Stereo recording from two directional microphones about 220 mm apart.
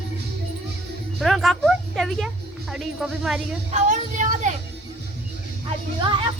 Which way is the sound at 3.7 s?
35° right (ahead or behind).